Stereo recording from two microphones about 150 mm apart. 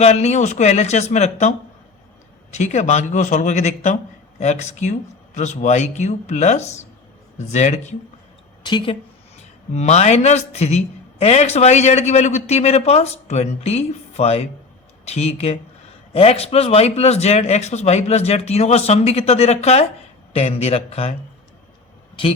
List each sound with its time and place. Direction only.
0.0 s a man's voice: 45° left (ahead or behind)
8.6 s a woman's voice: 35° left (ahead or behind)
9.7 s a man's voice: 50° left (ahead or behind)